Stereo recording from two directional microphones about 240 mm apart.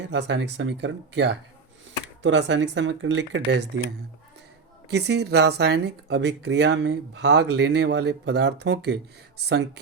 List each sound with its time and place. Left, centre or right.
0.1 s speech: right
4.9 s speech: right